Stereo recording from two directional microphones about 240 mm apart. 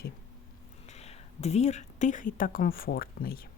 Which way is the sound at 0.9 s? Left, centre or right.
Left.